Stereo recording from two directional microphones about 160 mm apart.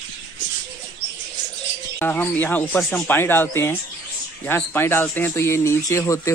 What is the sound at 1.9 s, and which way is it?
Speech, 10° left (ahead or behind).